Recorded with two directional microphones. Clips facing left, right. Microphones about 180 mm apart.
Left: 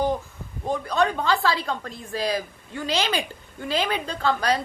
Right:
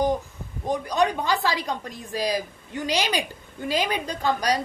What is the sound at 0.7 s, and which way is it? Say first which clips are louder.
A woman's voice: even; 15° right (ahead or behind).